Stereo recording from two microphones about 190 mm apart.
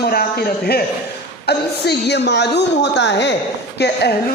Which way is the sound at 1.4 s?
60° left (ahead or behind).